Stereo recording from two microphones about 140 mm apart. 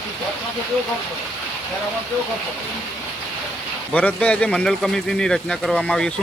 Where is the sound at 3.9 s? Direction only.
10° left (ahead or behind).